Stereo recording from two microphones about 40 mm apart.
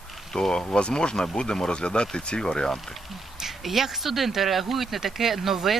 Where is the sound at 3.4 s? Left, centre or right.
Centre.